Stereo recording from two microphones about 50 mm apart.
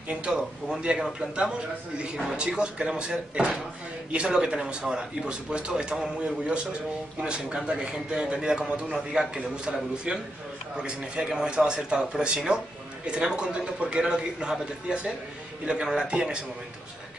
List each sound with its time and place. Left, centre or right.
0.1 s a man's voice: right